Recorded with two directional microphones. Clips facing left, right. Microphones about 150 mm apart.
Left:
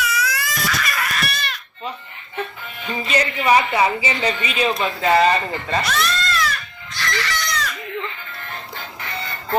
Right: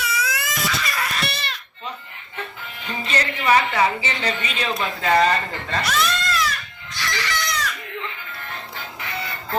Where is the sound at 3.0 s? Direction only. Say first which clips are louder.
Left 3 dB; 10° left (ahead or behind).